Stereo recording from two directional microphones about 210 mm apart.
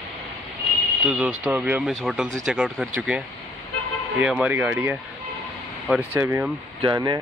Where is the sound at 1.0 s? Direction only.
5° right (ahead or behind).